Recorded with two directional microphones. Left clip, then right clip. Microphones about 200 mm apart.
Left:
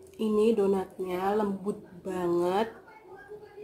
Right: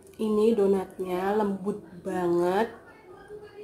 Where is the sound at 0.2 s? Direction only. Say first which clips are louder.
Right 2 dB; 15° left (ahead or behind).